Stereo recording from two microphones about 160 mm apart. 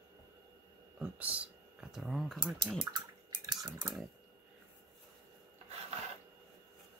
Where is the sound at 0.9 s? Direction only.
10° right (ahead or behind).